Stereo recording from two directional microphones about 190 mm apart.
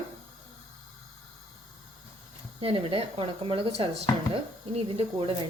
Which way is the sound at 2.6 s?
30° right (ahead or behind).